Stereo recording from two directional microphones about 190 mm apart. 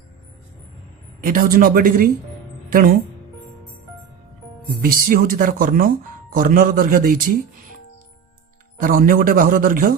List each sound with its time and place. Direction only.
1.2 s speech: 45° right (ahead or behind)
4.8 s speech: 45° right (ahead or behind)
8.8 s speech: 45° right (ahead or behind)